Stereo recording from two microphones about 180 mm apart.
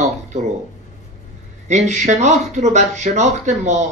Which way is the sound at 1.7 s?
40° right (ahead or behind).